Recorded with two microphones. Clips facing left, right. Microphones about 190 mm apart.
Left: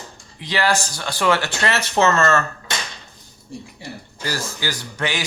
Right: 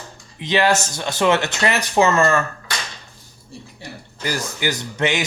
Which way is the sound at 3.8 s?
15° right (ahead or behind).